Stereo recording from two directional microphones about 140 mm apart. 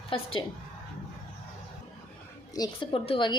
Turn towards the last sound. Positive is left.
turn(degrees=35)  # may be behind; listen again after turning